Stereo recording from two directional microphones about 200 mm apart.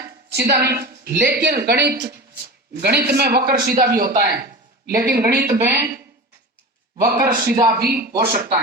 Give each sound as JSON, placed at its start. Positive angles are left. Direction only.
{"t": 0.0, "sound": "a woman's voice", "side_deg": -55}
{"t": 7.1, "sound": "a man's voice", "side_deg": -50}